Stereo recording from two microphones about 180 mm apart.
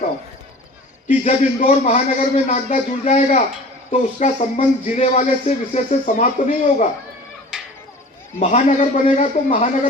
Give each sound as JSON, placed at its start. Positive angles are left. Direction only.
{"t": 1.2, "sound": "speech", "side_deg": 40}
{"t": 7.5, "sound": "a sound", "side_deg": -5}
{"t": 8.4, "sound": "a man's voice", "side_deg": 40}